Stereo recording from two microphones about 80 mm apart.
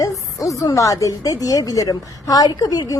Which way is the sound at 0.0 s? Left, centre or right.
Left.